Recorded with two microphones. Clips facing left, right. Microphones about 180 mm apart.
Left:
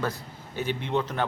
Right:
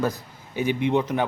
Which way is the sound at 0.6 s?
15° right (ahead or behind).